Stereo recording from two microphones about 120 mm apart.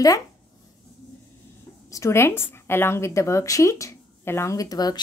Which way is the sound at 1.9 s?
25° left (ahead or behind).